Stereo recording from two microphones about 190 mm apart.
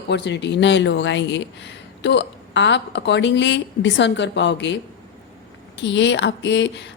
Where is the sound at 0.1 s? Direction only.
65° left (ahead or behind).